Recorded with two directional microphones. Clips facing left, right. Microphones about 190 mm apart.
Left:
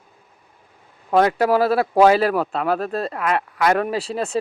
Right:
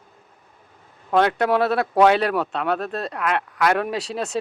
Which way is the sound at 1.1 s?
5° left (ahead or behind).